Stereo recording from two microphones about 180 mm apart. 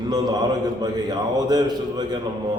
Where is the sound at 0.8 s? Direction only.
20° right (ahead or behind).